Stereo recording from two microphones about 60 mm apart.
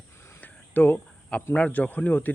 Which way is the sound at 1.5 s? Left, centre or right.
Left.